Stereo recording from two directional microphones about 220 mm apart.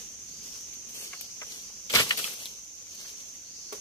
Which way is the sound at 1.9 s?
15° left (ahead or behind).